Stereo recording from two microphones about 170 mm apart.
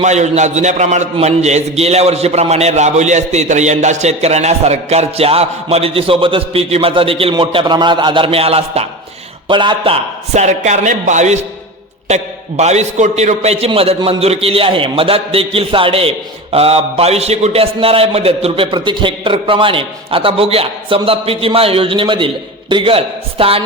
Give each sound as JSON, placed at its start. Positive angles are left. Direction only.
{"t": 0.0, "sound": "a man's voice", "side_deg": -45}